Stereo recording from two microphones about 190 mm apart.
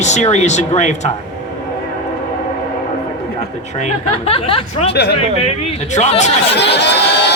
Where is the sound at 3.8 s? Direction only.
30° left (ahead or behind).